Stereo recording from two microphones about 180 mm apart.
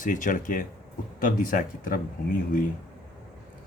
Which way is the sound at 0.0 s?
45° left (ahead or behind).